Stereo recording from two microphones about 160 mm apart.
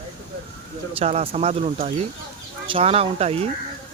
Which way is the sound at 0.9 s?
40° right (ahead or behind).